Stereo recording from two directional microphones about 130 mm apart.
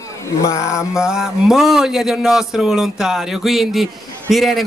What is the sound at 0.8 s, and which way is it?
Speech, 5° right (ahead or behind).